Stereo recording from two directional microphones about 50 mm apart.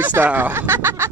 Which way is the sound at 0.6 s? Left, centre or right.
Right.